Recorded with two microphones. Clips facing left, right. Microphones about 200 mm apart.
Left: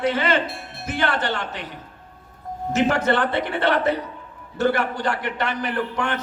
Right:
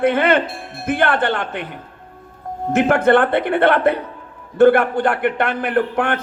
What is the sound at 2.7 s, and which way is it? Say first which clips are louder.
A man's voice: right 6 dB; 55° right (ahead or behind).